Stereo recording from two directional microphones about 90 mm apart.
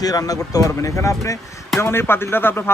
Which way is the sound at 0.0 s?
45° left (ahead or behind).